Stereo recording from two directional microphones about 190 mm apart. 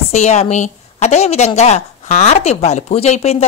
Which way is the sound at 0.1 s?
35° left (ahead or behind).